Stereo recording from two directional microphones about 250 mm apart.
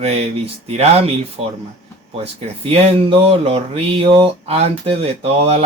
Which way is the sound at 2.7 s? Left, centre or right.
Right.